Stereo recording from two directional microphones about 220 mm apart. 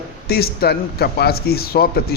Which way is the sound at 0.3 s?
45° left (ahead or behind).